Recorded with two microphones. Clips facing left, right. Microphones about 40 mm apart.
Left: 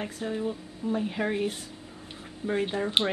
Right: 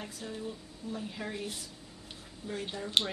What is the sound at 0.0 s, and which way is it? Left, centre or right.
A woman's voice, left.